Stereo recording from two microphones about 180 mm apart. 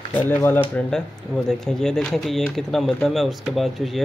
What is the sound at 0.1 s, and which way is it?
Speech, 10° left (ahead or behind).